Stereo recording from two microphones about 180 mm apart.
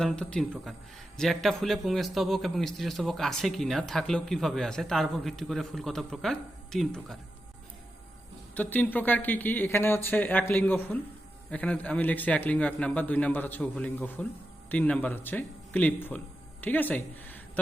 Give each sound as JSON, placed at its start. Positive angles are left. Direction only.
{"t": 0.0, "sound": "a man's voice", "side_deg": 5}
{"t": 8.5, "sound": "a man's voice", "side_deg": 10}